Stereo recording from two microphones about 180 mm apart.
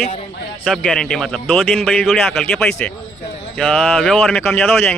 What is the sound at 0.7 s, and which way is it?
Speech, centre (ahead or behind).